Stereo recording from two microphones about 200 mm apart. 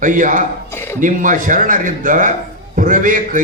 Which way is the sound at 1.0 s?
40° right (ahead or behind).